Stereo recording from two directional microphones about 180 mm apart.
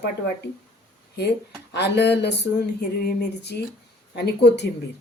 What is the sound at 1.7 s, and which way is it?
Speech, 70° left (ahead or behind).